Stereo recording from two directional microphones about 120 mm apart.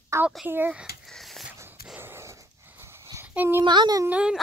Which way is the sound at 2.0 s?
20° right (ahead or behind).